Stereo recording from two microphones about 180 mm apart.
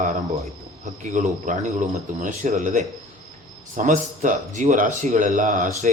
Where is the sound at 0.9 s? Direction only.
45° right (ahead or behind).